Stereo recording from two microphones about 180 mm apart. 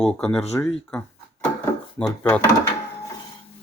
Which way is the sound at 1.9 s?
5° left (ahead or behind).